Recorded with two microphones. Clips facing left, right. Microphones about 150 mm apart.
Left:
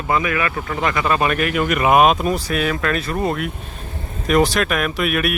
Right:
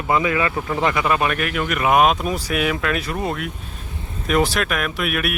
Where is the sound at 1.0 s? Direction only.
5° right (ahead or behind).